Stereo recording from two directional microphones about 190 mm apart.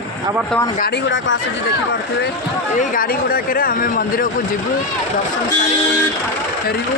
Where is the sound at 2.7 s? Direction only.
45° left (ahead or behind).